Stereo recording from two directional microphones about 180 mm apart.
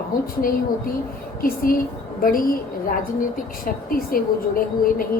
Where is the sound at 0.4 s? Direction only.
50° left (ahead or behind).